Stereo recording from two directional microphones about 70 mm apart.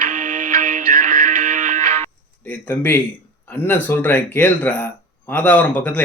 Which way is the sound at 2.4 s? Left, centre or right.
Left.